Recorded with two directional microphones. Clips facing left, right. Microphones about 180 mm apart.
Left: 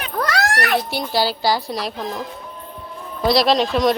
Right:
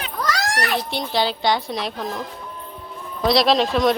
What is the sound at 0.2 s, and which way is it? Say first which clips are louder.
Children playing: left 3 dB; 60° left (ahead or behind).